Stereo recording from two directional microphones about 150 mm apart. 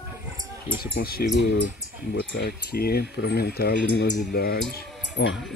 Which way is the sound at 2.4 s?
90° left.